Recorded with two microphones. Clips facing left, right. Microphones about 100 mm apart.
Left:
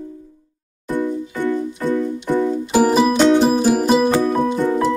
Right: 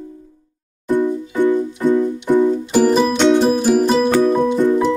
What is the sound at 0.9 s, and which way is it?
Music, 15° right (ahead or behind).